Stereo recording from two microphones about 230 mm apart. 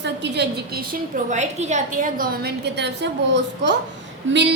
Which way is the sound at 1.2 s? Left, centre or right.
Right.